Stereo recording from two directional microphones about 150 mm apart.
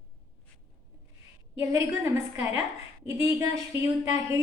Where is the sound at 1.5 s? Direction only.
20° right (ahead or behind).